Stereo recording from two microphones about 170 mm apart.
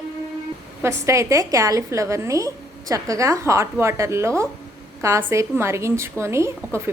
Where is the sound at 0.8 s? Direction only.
15° right (ahead or behind).